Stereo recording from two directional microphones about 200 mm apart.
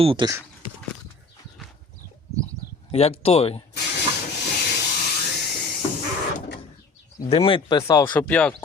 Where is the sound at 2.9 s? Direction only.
30° left (ahead or behind).